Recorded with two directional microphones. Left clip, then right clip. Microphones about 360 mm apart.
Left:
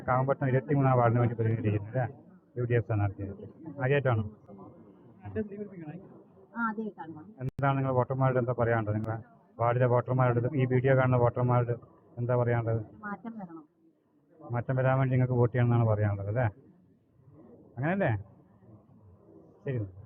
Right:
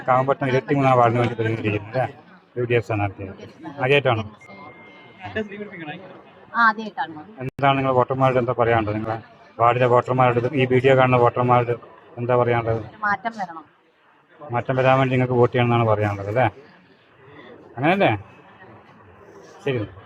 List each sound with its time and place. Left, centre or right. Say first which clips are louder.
0.0 s a man's voice: right 10 dB; centre
5.3 s a man's voice: right 8 dB; centre
17.7 s a man's voice: right 12 dB; centre